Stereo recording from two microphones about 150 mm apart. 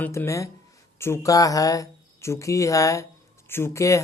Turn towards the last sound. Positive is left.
turn(degrees=20)  # may be behind; listen again after turning